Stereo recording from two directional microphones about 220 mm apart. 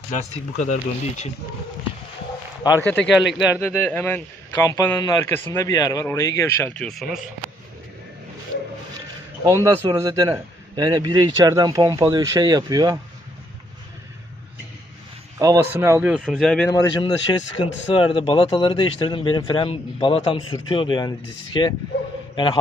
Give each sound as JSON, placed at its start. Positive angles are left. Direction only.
{"t": 0.1, "sound": "speech", "side_deg": 35}
{"t": 2.8, "sound": "speech", "side_deg": 5}
{"t": 3.6, "sound": "speech", "side_deg": 10}
{"t": 9.6, "sound": "speech", "side_deg": -15}
{"t": 15.4, "sound": "speech", "side_deg": -15}
{"t": 16.6, "sound": "speech", "side_deg": 15}